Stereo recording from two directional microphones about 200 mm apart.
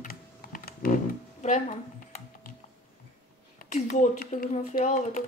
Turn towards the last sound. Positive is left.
turn(degrees=40)  # may be behind; listen again after turning